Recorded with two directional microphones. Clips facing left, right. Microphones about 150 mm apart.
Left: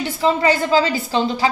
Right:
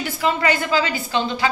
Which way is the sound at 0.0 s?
30° left (ahead or behind).